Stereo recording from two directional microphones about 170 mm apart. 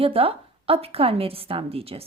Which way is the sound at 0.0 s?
35° right (ahead or behind).